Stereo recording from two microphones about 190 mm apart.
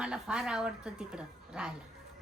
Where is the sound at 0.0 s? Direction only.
5° right (ahead or behind).